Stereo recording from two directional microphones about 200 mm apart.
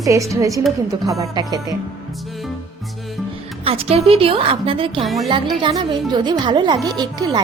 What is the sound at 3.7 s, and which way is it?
Speech, 30° right (ahead or behind).